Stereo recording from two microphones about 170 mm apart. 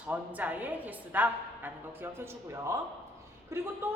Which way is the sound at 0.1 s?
10° right (ahead or behind).